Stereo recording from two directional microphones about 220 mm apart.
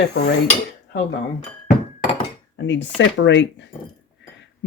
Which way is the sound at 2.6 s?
55° left (ahead or behind).